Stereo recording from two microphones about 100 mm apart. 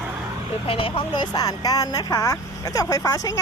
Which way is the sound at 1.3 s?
40° left (ahead or behind).